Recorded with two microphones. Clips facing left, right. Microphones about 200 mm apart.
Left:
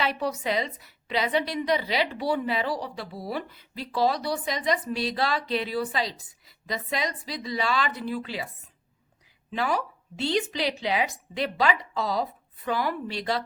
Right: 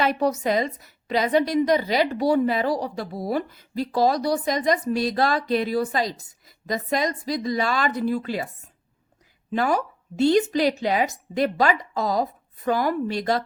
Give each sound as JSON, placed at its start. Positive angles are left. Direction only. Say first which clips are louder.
{"t": 0.0, "sound": "a woman's voice", "louder": "right 6 dB", "side_deg": -45}
{"t": 9.5, "sound": "a woman's voice", "louder": "right 5 dB", "side_deg": -45}